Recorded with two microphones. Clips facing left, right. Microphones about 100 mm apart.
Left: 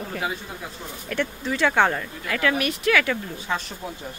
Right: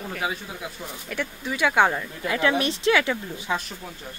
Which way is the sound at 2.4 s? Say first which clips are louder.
Right 1 dB; 25° right (ahead or behind).